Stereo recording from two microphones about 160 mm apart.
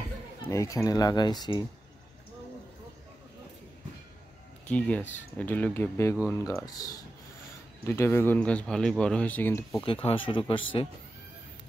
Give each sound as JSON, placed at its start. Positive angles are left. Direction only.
{"t": 0.5, "sound": "speech", "side_deg": 20}
{"t": 4.6, "sound": "speech", "side_deg": 10}
{"t": 9.8, "sound": "speech", "side_deg": 35}